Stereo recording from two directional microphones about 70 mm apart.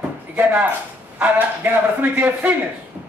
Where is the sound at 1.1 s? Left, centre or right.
Right.